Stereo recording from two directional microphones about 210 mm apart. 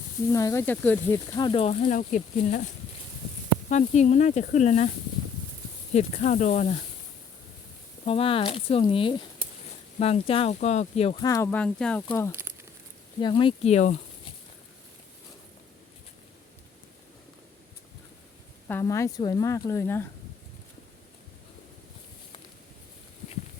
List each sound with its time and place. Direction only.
0.3 s speech: 15° left (ahead or behind)
1.8 s speech: 40° left (ahead or behind)
3.7 s speech: 35° left (ahead or behind)
5.9 s speech: 35° left (ahead or behind)
8.0 s speech: 25° left (ahead or behind)
11.3 s speech: 10° left (ahead or behind)
12.3 s speech: 10° right (ahead or behind)
13.1 s speech: 20° left (ahead or behind)
18.7 s speech: 15° left (ahead or behind)